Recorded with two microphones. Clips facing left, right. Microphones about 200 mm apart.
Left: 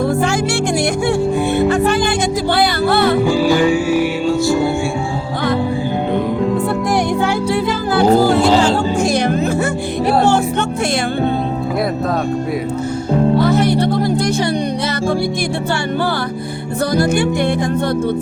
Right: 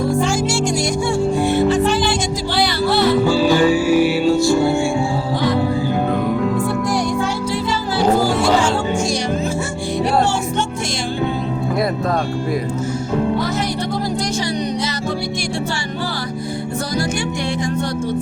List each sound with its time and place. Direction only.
0.0 s music: 60° left (ahead or behind)
3.2 s music: 15° left (ahead or behind)
6.9 s music: 60° left (ahead or behind)